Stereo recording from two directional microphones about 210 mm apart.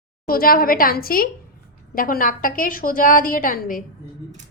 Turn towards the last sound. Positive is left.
turn(degrees=40)  # may be behind; listen again after turning